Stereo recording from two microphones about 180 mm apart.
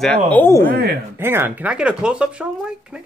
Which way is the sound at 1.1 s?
15° right (ahead or behind).